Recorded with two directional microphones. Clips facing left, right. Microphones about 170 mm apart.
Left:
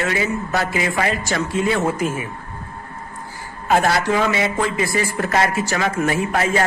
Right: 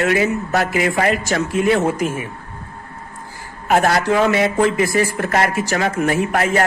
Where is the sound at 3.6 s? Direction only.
55° right (ahead or behind).